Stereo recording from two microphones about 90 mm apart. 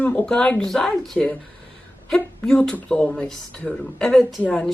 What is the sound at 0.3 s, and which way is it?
Speech, 10° left (ahead or behind).